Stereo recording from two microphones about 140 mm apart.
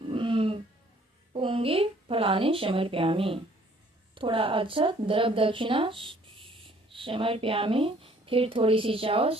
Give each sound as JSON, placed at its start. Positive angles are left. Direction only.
{"t": 0.1, "sound": "music", "side_deg": -40}
{"t": 1.3, "sound": "speech", "side_deg": -40}